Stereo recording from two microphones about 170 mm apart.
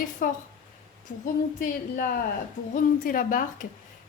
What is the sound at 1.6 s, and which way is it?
A woman's voice, 55° left (ahead or behind).